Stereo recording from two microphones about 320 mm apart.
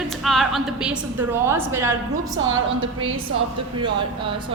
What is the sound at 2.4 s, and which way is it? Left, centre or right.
A woman's voice, right.